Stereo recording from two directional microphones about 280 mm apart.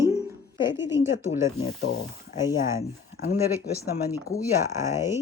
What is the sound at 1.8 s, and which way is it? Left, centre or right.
Speech, left.